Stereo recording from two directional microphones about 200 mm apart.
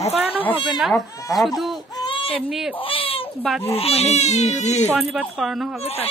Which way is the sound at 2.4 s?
Centre (ahead or behind).